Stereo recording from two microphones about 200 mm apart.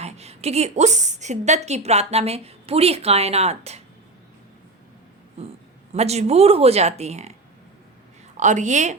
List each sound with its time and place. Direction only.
0.0 s a woman's voice: 30° right (ahead or behind)
5.9 s a woman's voice: 30° right (ahead or behind)
8.4 s a woman's voice: 35° right (ahead or behind)